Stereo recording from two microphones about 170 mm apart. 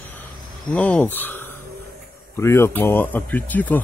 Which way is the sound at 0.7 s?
10° left (ahead or behind).